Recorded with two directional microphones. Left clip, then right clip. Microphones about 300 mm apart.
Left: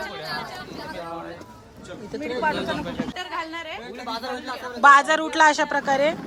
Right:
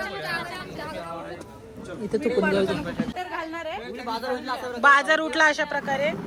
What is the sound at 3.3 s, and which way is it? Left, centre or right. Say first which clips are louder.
Speech: even; centre.